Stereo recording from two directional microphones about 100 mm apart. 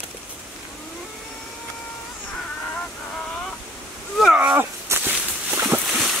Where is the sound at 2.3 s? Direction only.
10° left (ahead or behind).